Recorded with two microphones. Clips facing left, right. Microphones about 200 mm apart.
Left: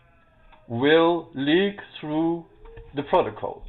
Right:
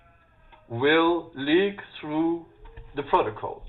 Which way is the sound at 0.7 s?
25° left (ahead or behind).